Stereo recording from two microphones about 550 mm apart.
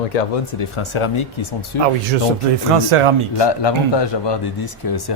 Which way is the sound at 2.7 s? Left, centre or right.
Right.